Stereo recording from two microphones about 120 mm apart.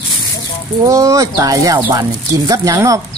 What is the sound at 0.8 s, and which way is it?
Speech, 25° right (ahead or behind).